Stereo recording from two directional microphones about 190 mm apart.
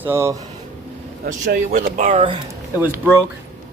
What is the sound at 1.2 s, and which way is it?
Speech, 55° right (ahead or behind).